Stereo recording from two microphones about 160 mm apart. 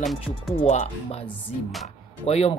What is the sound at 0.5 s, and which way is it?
Speech, 40° left (ahead or behind).